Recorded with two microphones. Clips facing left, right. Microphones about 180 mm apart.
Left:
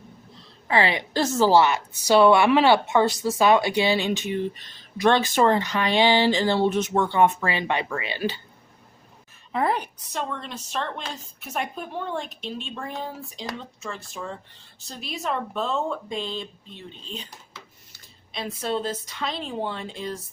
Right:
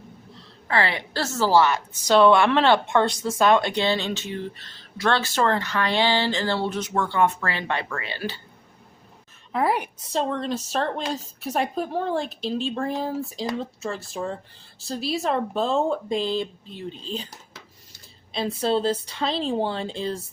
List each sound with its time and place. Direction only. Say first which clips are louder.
0.7 s a woman's voice: left 2 dB; 15° left (ahead or behind)
9.5 s a woman's voice: right 1 dB; 5° right (ahead or behind)
10.0 s a woman's voice: right 6 dB; 30° right (ahead or behind)